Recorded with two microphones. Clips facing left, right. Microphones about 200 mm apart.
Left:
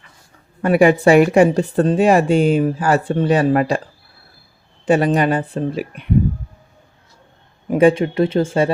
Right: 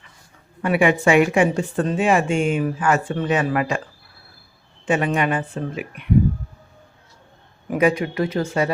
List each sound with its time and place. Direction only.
0.6 s speech: 40° left (ahead or behind)
4.9 s speech: 35° left (ahead or behind)
7.7 s speech: 30° left (ahead or behind)